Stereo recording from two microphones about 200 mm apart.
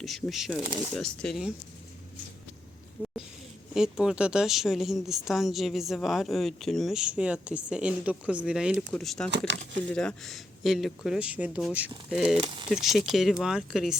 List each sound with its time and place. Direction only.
0.0 s a woman's voice: centre (ahead or behind)
0.6 s speech: 20° right (ahead or behind)
0.9 s a woman's voice: centre (ahead or behind)
3.0 s a sound: 5° right (ahead or behind)
3.8 s a woman's voice: 5° right (ahead or behind)
9.5 s speech: 65° right (ahead or behind)
9.9 s a woman's voice: 5° left (ahead or behind)